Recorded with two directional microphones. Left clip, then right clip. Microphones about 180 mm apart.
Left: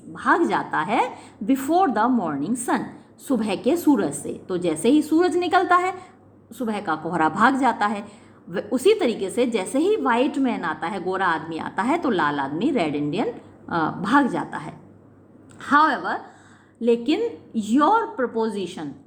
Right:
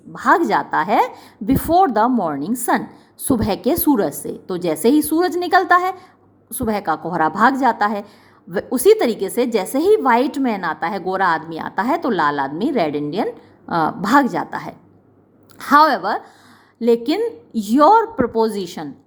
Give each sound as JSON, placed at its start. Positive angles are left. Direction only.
{"t": 0.1, "sound": "a woman's voice", "side_deg": -30}